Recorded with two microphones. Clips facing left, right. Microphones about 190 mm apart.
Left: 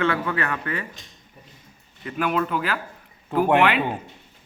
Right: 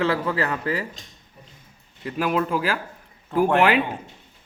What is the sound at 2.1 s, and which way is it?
Speech, 35° right (ahead or behind).